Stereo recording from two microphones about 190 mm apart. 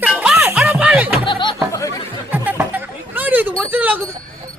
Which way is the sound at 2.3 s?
10° right (ahead or behind).